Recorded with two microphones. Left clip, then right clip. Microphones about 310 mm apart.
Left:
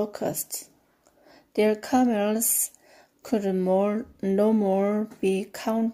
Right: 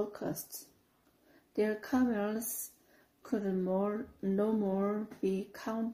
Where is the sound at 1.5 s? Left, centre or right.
Left.